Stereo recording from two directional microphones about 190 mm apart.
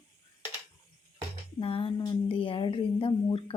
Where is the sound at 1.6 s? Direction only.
30° left (ahead or behind).